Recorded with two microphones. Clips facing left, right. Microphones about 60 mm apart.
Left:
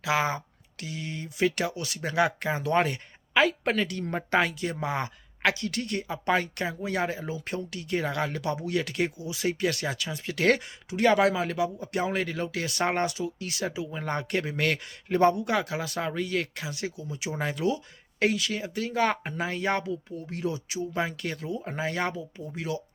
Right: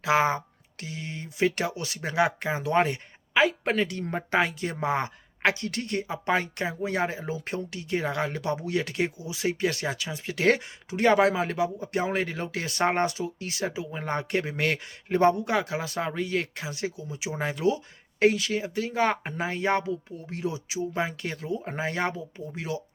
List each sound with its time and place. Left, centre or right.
0.0 s a woman's voice: right; by 4.5 s centre
4.6 s speech: right